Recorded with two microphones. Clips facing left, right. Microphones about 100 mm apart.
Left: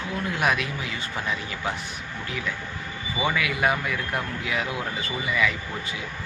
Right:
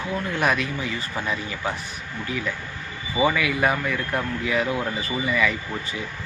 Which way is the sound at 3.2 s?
Centre (ahead or behind).